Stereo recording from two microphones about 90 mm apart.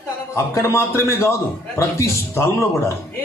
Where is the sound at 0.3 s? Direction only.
30° left (ahead or behind).